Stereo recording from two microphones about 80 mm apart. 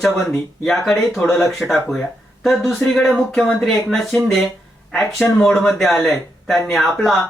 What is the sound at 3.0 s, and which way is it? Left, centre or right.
Speech, centre.